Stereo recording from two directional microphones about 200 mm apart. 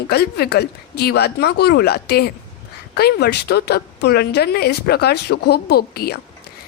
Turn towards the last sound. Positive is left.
turn(degrees=50)  # may be behind; listen again after turning